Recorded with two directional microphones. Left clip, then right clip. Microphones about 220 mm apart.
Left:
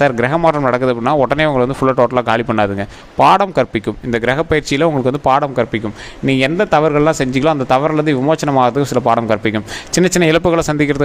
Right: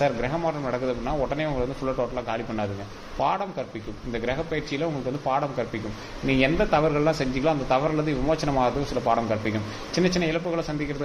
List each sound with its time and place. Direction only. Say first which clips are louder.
0.0 s a man's voice: left 12 dB; 50° left (ahead or behind)